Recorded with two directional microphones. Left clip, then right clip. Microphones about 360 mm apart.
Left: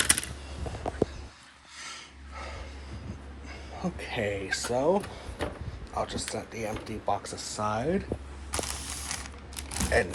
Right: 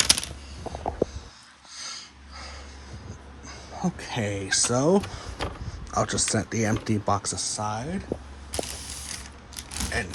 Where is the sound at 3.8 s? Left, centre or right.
Centre.